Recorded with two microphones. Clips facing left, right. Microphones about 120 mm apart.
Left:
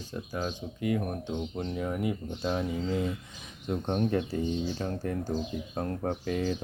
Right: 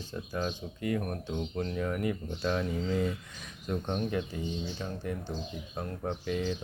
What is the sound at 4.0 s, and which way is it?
Speech, 40° left (ahead or behind).